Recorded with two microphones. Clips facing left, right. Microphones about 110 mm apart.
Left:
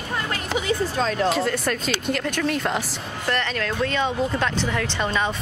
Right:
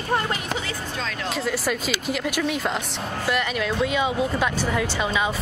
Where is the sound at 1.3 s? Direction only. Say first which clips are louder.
Left 2 dB; centre (ahead or behind).